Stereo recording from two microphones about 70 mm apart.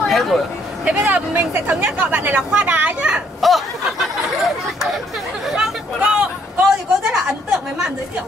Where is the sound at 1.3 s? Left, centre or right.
Right.